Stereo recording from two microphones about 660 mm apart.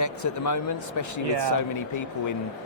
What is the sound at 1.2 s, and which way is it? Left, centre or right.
Speech, right.